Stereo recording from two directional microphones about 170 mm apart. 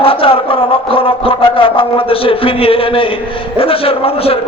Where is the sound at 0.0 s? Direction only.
35° left (ahead or behind).